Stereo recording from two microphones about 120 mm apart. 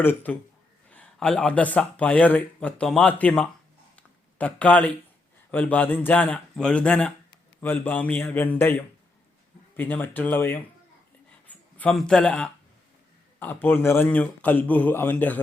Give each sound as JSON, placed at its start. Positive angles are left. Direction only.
{"t": 0.0, "sound": "speech", "side_deg": 15}
{"t": 3.9, "sound": "a sound", "side_deg": 10}
{"t": 5.5, "sound": "speech", "side_deg": 10}
{"t": 11.4, "sound": "a sound", "side_deg": 15}
{"t": 11.9, "sound": "speech", "side_deg": 5}
{"t": 13.4, "sound": "speech", "side_deg": 15}